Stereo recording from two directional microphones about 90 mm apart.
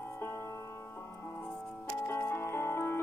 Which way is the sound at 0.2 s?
25° left (ahead or behind).